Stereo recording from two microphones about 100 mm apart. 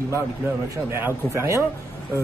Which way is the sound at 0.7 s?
25° right (ahead or behind).